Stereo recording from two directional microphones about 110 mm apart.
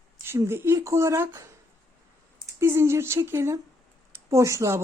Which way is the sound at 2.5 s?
25° right (ahead or behind).